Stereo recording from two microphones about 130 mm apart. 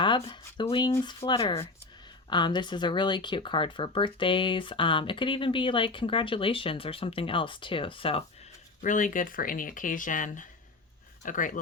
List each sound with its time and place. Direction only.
0.0 s speech: 40° left (ahead or behind)
8.8 s speech: 85° left